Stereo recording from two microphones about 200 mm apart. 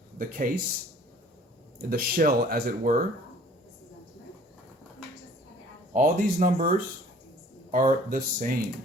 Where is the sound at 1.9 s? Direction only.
50° right (ahead or behind).